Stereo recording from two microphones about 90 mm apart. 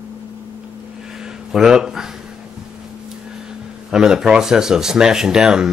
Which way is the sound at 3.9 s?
5° right (ahead or behind).